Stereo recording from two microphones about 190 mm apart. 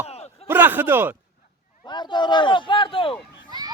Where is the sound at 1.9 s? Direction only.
25° left (ahead or behind).